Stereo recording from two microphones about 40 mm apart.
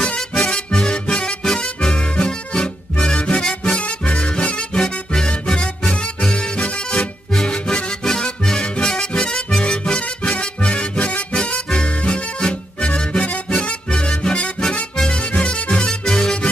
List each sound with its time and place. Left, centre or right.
0.0 s music: centre
1.4 s music: centre
3.8 s music: left; by 16.3 s centre